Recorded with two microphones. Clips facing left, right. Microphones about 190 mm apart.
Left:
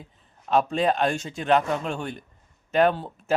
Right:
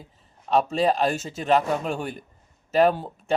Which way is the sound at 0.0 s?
Centre (ahead or behind).